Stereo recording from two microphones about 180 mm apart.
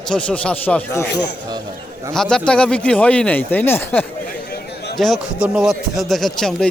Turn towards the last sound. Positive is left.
turn(degrees=0)  # may be behind; listen again after turning